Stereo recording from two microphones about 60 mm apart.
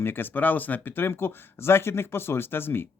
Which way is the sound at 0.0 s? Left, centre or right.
Left.